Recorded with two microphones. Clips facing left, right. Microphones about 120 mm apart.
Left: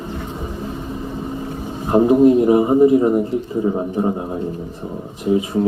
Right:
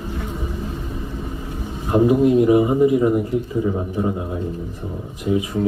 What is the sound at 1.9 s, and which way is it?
A man's voice, 35° left (ahead or behind).